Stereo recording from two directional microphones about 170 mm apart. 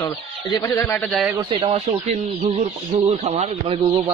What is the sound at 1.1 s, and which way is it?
Speech, centre (ahead or behind).